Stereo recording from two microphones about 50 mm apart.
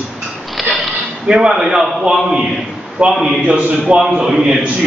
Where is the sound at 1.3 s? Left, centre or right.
Centre.